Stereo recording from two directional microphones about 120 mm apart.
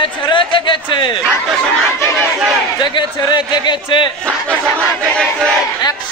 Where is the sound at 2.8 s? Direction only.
40° left (ahead or behind).